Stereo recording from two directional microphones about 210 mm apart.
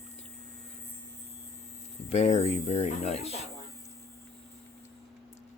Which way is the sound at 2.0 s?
30° left (ahead or behind).